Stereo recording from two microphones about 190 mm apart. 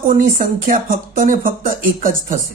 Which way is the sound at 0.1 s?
45° right (ahead or behind).